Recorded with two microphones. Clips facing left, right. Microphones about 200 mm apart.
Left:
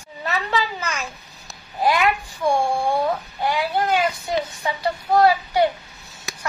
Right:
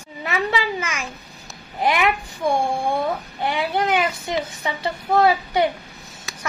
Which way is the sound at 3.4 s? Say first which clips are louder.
Even; 25° right (ahead or behind).